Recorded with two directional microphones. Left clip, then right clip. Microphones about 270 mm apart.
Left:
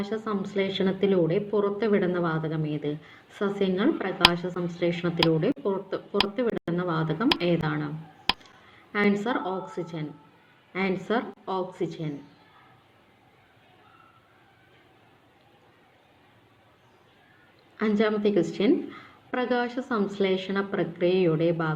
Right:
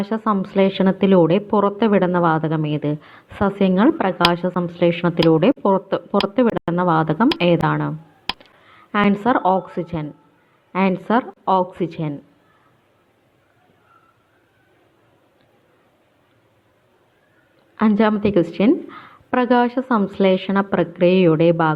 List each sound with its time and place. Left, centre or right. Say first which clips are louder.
0.0 s a woman's voice: right 9 dB; right
8.3 s a sound: even; centre
8.9 s a woman's voice: right 8 dB; right
17.7 s a woman's voice: right 7 dB; right